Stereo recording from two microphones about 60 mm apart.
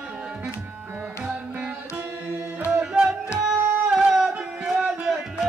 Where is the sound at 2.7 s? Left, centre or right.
Centre.